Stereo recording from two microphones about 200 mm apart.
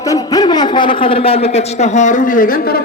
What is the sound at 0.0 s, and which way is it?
A man's voice, 15° left (ahead or behind).